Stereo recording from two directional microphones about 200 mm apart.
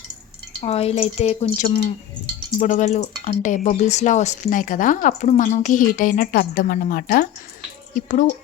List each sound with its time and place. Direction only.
0.6 s speech: 30° left (ahead or behind)
1.6 s speech: 45° left (ahead or behind)